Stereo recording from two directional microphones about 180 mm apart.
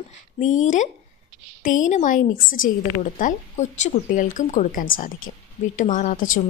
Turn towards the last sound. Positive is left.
turn(degrees=45)  # may be behind; listen again after turning